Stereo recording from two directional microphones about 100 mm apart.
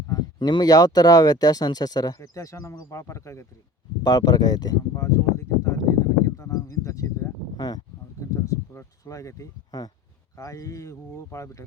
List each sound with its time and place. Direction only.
0.3 s speech: 50° left (ahead or behind); by 3.4 s 30° left (ahead or behind)
4.0 s speech: 45° left (ahead or behind)
4.9 s a sound: 30° left (ahead or behind)
7.5 s speech: 40° left (ahead or behind)
8.2 s a sound: 30° left (ahead or behind)
10.3 s speech: 35° left (ahead or behind)